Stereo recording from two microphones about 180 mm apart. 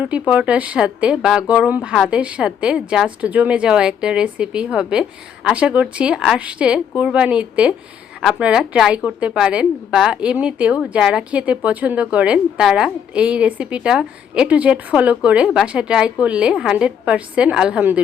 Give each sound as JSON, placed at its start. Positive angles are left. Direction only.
{"t": 0.0, "sound": "a woman's voice", "side_deg": -5}